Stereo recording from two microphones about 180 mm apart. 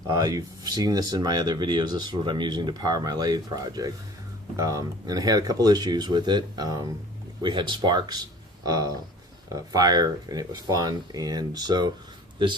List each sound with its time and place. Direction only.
0.1 s speech: 20° right (ahead or behind)